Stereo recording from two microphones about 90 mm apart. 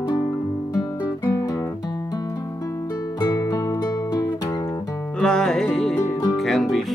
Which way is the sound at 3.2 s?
45° left (ahead or behind).